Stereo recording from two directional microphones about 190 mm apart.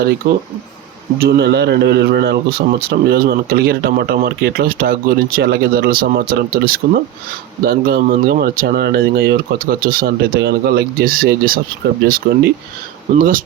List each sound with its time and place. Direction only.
0.2 s a man's voice: 55° right (ahead or behind)